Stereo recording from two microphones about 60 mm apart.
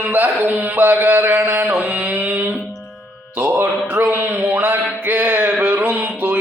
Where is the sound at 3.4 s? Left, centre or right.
Right.